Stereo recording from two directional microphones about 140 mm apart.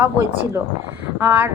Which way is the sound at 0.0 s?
20° right (ahead or behind).